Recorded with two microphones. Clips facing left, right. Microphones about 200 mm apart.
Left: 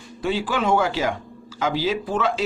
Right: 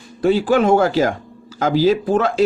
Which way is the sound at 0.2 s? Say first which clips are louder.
Right 9 dB; 45° right (ahead or behind).